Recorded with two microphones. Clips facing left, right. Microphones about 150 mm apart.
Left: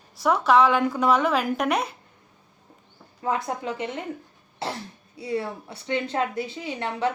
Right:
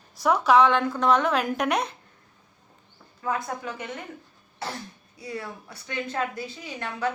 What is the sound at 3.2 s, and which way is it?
A woman's voice, 25° left (ahead or behind).